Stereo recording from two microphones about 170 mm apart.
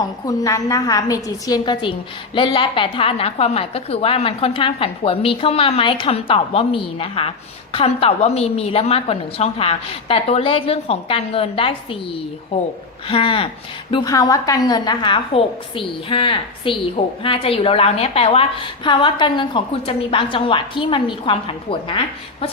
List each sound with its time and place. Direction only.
0.3 s a woman's voice: 20° left (ahead or behind)